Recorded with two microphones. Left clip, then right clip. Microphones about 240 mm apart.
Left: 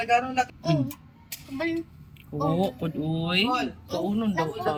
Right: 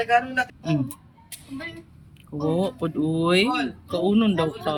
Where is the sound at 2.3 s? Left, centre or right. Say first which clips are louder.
Right 2 dB; centre.